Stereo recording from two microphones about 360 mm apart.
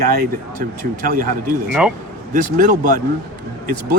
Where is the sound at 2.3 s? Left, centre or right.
Right.